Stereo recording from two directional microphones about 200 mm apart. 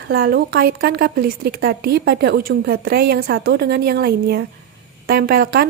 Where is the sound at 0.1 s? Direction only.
50° right (ahead or behind).